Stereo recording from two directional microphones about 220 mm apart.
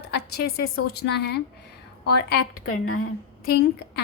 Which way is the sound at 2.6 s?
75° left (ahead or behind).